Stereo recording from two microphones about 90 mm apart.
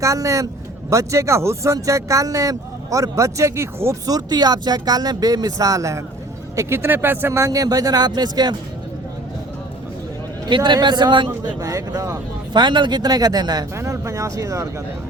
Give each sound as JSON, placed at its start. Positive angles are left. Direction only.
{"t": 0.0, "sound": "speech", "side_deg": -35}
{"t": 4.0, "sound": "speech", "side_deg": -45}
{"t": 10.5, "sound": "a man's voice", "side_deg": -55}
{"t": 11.6, "sound": "speech", "side_deg": -40}
{"t": 12.5, "sound": "speech", "side_deg": -60}
{"t": 13.7, "sound": "speech", "side_deg": -35}